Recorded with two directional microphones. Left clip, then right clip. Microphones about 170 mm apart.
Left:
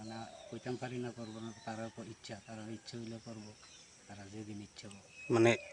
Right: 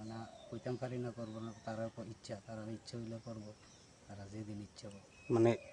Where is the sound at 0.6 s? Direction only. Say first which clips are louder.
Even; 35° right (ahead or behind).